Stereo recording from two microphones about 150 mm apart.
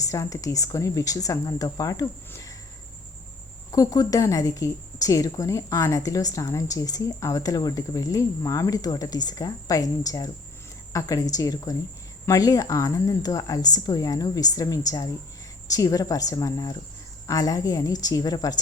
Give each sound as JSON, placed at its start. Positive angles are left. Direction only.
{"t": 0.0, "sound": "a woman's voice", "side_deg": 20}
{"t": 3.7, "sound": "a woman's voice", "side_deg": 25}